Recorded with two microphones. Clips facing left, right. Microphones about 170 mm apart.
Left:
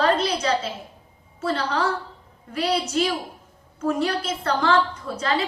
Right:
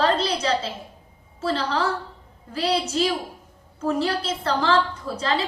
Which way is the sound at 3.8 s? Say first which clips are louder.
Even; 30° right (ahead or behind).